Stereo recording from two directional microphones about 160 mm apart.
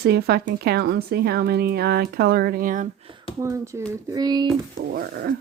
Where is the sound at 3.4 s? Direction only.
20° right (ahead or behind).